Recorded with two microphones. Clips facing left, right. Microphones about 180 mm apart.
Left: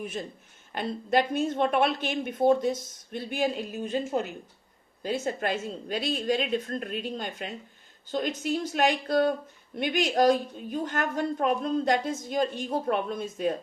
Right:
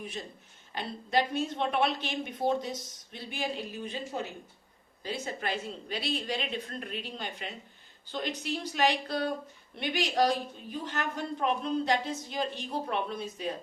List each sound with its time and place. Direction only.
0.0 s a woman's voice: 50° left (ahead or behind)